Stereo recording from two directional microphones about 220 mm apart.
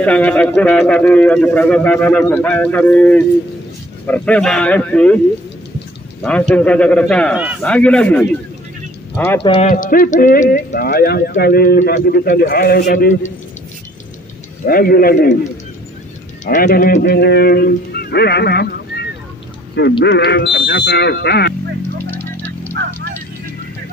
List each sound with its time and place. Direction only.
0.0 s a man's voice: 5° left (ahead or behind)
6.2 s a man's voice: 5° left (ahead or behind)
9.4 s speech: 25° left (ahead or behind)
9.7 s speech: 40° left (ahead or behind)
14.7 s speech: 40° left (ahead or behind)
16.4 s speech: 40° left (ahead or behind)
22.1 s a sound: 10° left (ahead or behind)